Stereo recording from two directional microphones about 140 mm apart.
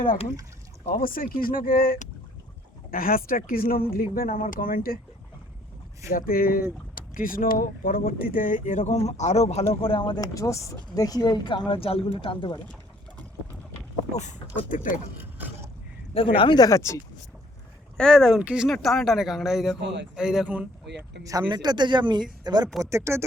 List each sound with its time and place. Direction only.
0.9 s speech: 90° left
6.1 s speech: 90° left; by 12.5 s 40° left (ahead or behind)
14.1 s speech: 55° left (ahead or behind)
14.7 s speech: 70° left (ahead or behind)
15.2 s a sound: 15° right (ahead or behind)
16.1 s speech: 40° left (ahead or behind); by 17.0 s 20° left (ahead or behind)
17.9 s speech: 5° left (ahead or behind)
21.4 s speech: 30° right (ahead or behind)